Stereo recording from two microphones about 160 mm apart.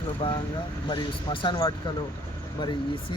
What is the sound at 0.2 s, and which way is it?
Speech, 30° left (ahead or behind).